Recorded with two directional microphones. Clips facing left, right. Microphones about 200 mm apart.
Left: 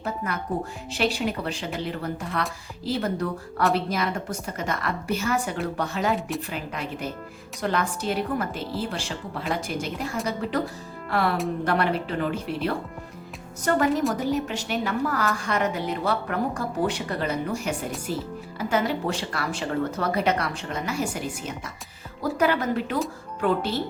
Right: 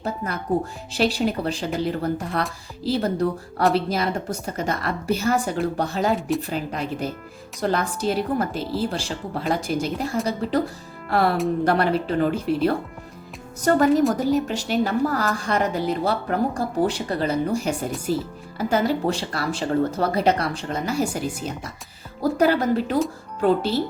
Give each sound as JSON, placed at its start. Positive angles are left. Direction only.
{"t": 0.9, "sound": "a woman's voice", "side_deg": -35}